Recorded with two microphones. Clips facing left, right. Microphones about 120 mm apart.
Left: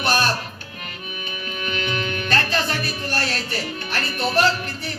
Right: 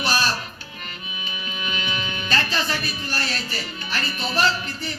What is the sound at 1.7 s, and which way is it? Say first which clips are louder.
Music: left 5 dB; 60° left (ahead or behind).